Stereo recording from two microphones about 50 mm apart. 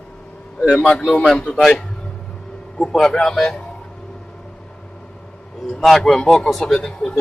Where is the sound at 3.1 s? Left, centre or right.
Centre.